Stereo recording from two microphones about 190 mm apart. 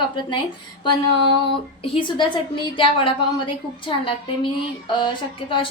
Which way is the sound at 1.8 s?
30° left (ahead or behind).